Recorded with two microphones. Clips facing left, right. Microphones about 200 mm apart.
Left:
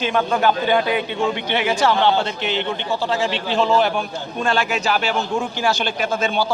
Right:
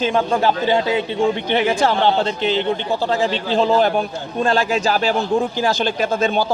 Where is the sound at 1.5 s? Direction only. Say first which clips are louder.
Right 2 dB; 40° right (ahead or behind).